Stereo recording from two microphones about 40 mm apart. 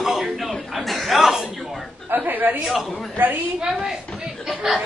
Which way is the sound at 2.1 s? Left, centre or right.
Right.